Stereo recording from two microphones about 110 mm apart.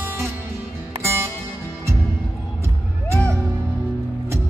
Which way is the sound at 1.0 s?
25° right (ahead or behind).